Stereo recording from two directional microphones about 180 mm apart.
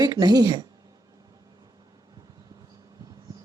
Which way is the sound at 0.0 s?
20° right (ahead or behind).